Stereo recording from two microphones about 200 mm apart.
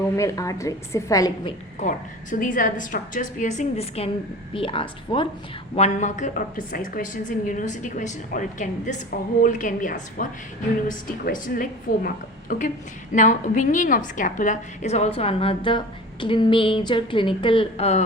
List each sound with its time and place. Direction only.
0.2 s a woman's voice: 15° left (ahead or behind)
1.8 s a woman's voice: 40° left (ahead or behind)